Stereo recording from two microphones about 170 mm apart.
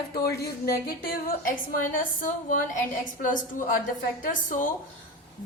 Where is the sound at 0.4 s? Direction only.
65° left (ahead or behind).